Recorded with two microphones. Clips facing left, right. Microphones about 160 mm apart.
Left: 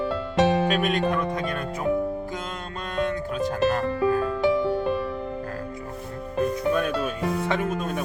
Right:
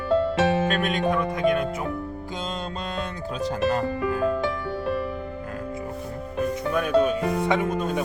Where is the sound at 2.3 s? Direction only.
25° right (ahead or behind).